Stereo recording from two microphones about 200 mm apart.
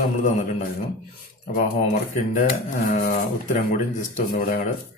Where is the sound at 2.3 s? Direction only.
40° left (ahead or behind).